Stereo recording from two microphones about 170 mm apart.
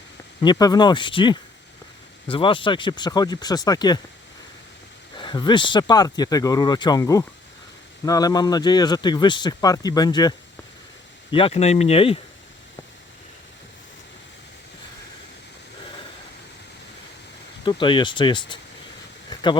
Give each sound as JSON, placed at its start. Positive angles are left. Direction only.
{"t": 0.4, "sound": "speech", "side_deg": 20}
{"t": 5.1, "sound": "speech", "side_deg": 25}
{"t": 17.7, "sound": "speech", "side_deg": 30}
{"t": 19.3, "sound": "a sound", "side_deg": 25}